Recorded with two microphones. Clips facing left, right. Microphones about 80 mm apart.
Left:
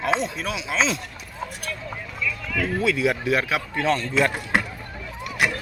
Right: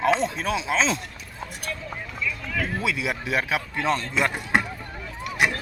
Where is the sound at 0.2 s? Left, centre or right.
Right.